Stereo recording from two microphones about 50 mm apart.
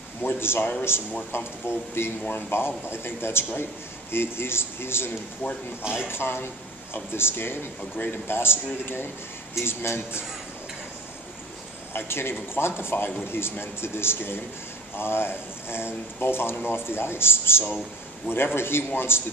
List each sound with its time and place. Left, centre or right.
0.2 s speech: left
5.4 s speech: left
6.0 s speech: left
11.9 s speech: left